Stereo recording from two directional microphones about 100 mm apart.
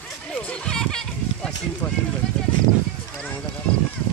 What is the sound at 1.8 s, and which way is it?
Speech, 25° left (ahead or behind).